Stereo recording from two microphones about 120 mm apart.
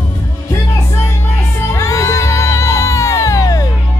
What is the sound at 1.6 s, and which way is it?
Music, 25° left (ahead or behind).